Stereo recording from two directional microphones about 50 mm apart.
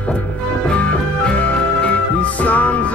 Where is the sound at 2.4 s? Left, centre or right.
Left.